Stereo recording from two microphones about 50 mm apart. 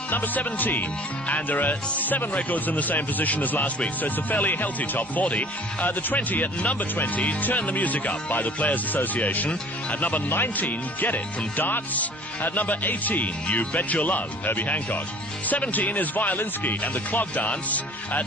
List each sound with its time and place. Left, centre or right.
0.1 s speech: left